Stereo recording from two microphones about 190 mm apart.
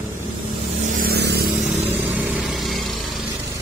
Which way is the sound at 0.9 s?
55° right (ahead or behind).